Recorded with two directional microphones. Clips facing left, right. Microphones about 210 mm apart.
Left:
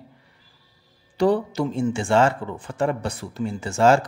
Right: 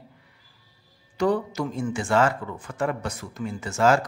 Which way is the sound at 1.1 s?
30° left (ahead or behind).